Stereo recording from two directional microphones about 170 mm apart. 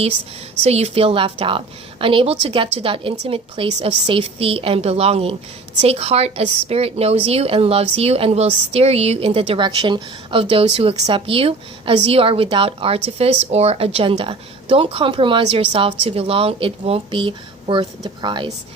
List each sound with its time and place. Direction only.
0.6 s a woman's voice: 40° right (ahead or behind)